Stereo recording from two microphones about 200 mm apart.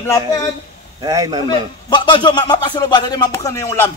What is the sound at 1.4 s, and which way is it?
Speech, 20° left (ahead or behind).